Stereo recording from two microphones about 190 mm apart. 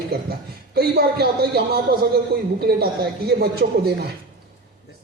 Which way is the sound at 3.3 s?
55° right (ahead or behind).